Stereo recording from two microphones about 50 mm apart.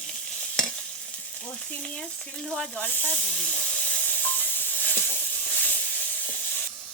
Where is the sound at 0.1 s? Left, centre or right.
Centre.